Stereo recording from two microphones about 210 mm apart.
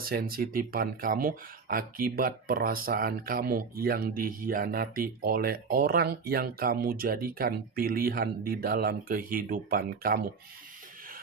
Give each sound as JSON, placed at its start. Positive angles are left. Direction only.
{"t": 0.0, "sound": "speech", "side_deg": -45}